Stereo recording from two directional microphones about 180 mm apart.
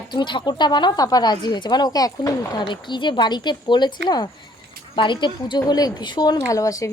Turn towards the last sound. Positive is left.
turn(degrees=20)  # may be behind; listen again after turning